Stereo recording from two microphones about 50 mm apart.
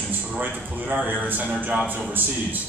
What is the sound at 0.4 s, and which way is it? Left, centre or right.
A man's voice, right.